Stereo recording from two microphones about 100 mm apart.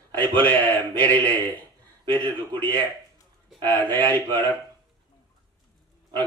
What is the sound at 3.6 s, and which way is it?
Speech, 20° left (ahead or behind).